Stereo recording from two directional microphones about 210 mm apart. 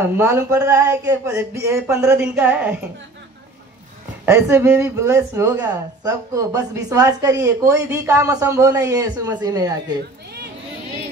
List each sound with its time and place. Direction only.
0.2 s speech: 10° right (ahead or behind)
4.3 s speech: 10° right (ahead or behind)